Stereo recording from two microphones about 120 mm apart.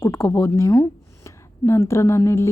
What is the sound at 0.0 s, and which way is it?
A woman's voice, 20° left (ahead or behind).